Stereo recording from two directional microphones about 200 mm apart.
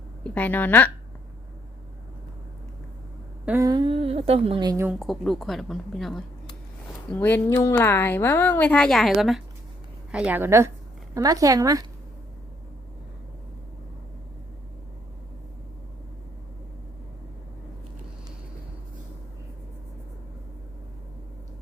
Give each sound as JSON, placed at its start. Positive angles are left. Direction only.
{"t": 0.3, "sound": "a woman's voice", "side_deg": 10}
{"t": 3.4, "sound": "humming", "side_deg": -10}
{"t": 3.7, "sound": "a woman's voice", "side_deg": -25}
{"t": 4.9, "sound": "a woman's voice", "side_deg": 0}